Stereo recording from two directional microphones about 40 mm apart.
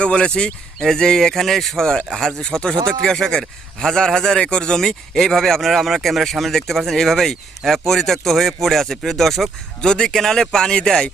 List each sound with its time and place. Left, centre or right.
0.0 s speech: left
0.8 s a man's voice: centre
9.9 s a man's voice: centre